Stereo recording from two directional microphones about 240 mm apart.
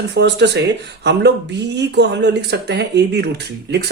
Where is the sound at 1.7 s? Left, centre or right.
Right.